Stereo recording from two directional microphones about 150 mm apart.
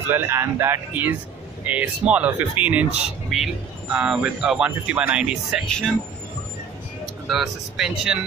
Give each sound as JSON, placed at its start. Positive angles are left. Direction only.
{"t": 0.1, "sound": "speech", "side_deg": -15}
{"t": 7.2, "sound": "speech", "side_deg": 0}